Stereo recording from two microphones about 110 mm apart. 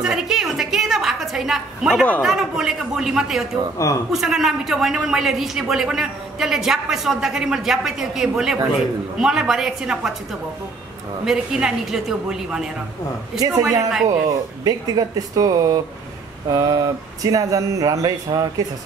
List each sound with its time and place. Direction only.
0.0 s a sound: 5° right (ahead or behind)
2.2 s a man's voice: 5° right (ahead or behind)
3.7 s a man's voice: 30° left (ahead or behind)
4.1 s a man's voice: 5° right (ahead or behind)
11.2 s a man's voice: 5° right (ahead or behind)
13.7 s a man's voice: 5° right (ahead or behind)
14.6 s speech: 35° right (ahead or behind)